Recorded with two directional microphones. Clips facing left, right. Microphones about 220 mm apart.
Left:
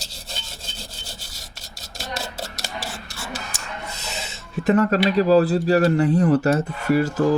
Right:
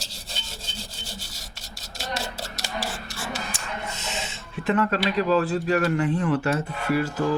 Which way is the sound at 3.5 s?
40° left (ahead or behind).